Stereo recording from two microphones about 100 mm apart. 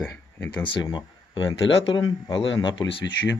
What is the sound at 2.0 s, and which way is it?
Speech, 45° left (ahead or behind).